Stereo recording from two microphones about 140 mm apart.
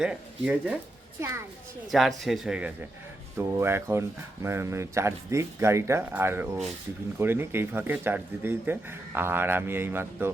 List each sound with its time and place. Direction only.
0.0 s speech: 10° right (ahead or behind)
1.9 s speech: centre (ahead or behind)
3.3 s speech: 15° right (ahead or behind)